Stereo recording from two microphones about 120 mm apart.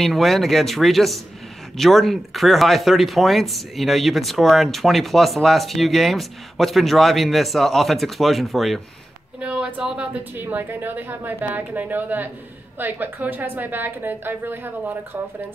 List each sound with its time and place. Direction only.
0.0 s speech: centre (ahead or behind)
9.4 s a woman's voice: 10° right (ahead or behind)